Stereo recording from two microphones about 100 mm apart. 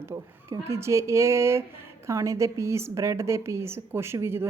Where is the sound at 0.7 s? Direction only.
30° right (ahead or behind).